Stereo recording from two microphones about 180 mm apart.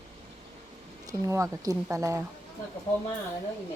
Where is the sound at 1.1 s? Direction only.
15° right (ahead or behind).